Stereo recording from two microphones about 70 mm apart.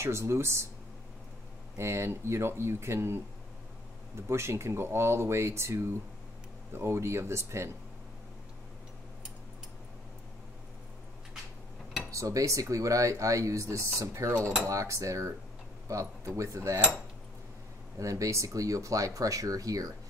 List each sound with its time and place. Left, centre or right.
0.0 s speech: right
1.8 s speech: right
4.3 s speech: right
12.1 s speech: right
17.9 s speech: right